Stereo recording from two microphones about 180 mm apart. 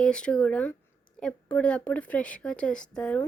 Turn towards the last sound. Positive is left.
turn(degrees=5)  # may be behind; listen again after turning